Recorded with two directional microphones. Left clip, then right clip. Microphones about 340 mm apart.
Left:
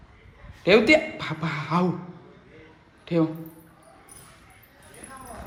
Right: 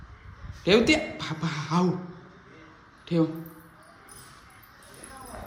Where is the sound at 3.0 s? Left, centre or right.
Centre.